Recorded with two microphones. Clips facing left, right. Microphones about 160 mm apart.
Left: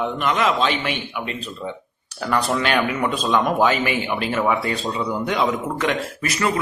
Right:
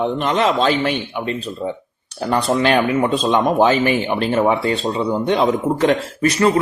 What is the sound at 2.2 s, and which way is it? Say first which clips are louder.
Speech: right 4 dB; 25° right (ahead or behind).